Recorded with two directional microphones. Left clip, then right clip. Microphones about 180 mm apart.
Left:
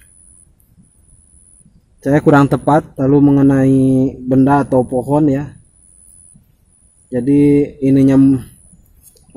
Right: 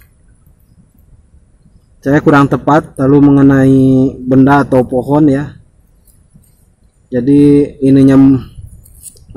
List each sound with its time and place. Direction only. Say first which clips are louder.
2.0 s a man's voice: right 2 dB; 25° left (ahead or behind)
7.1 s a man's voice: right 4 dB; 25° left (ahead or behind)